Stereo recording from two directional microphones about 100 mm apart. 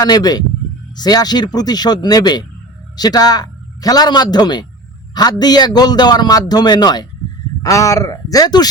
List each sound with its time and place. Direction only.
0.0 s a man's voice: 40° left (ahead or behind)